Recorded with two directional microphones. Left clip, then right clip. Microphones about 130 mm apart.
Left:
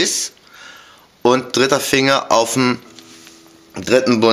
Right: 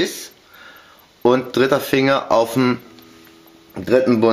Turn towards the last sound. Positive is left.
turn(degrees=25)  # may be behind; listen again after turning